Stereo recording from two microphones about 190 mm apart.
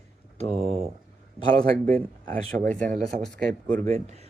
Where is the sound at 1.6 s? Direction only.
10° left (ahead or behind).